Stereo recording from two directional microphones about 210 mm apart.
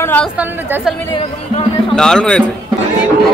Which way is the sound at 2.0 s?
5° left (ahead or behind).